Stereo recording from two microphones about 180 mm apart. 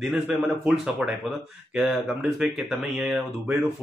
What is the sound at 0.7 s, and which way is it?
Speech, 5° right (ahead or behind).